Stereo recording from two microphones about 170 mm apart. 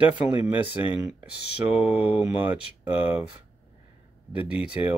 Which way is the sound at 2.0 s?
35° left (ahead or behind).